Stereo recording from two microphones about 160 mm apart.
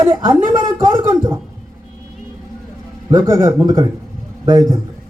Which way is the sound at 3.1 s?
25° right (ahead or behind).